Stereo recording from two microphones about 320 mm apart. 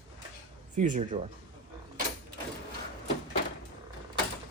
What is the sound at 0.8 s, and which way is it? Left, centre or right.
Speech, right.